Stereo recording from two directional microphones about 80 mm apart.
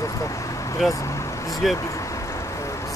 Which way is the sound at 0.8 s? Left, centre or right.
Centre.